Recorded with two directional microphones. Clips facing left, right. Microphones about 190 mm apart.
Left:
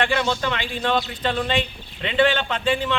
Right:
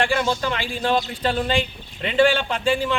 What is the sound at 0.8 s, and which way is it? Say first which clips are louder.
Speech: right 2 dB; 35° right (ahead or behind).